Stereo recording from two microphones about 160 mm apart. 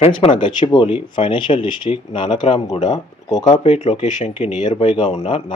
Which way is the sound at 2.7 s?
45° left (ahead or behind).